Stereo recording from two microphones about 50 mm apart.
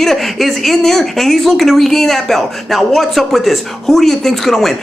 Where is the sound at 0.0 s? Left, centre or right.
Centre.